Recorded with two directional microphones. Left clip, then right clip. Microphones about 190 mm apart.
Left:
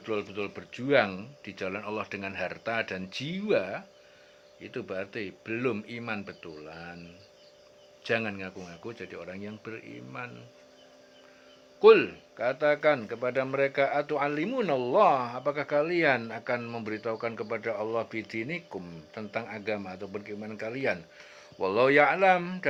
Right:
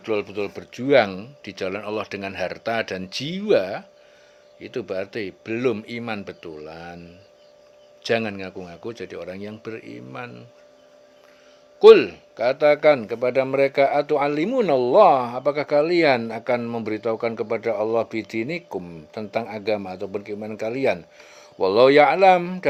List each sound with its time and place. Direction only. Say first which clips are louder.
0.0 s a man's voice: right 8 dB; 40° right (ahead or behind)
8.0 s a man's voice: right 7 dB; 45° right (ahead or behind)
11.8 s a man's voice: right 8 dB; 45° right (ahead or behind)